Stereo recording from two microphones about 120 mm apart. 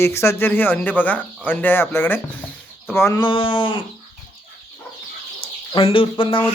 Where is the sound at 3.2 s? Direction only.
45° left (ahead or behind).